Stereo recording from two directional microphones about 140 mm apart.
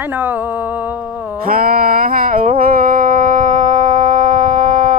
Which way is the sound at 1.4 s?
90° right.